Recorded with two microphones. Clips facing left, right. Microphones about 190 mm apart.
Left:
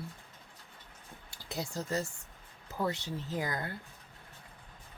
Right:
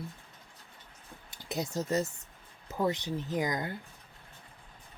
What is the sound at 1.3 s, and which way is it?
Speech, 20° right (ahead or behind).